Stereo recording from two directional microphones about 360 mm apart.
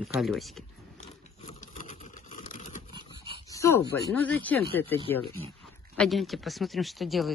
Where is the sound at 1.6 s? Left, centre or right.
Left.